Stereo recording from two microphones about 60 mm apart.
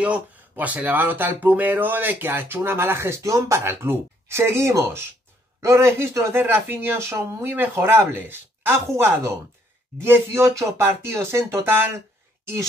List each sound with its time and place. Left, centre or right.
0.0 s speech: right
3.2 s a sound: right
3.6 s speech: right
7.0 s speech: right
7.4 s speech: right
10.3 s a sound: right
10.9 s speech: right